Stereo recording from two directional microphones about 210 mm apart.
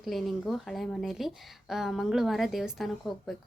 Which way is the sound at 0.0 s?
Centre (ahead or behind).